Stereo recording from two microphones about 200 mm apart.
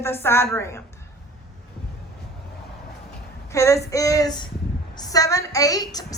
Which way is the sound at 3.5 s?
15° left (ahead or behind).